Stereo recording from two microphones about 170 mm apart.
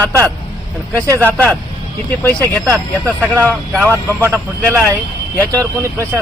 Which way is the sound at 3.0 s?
10° right (ahead or behind).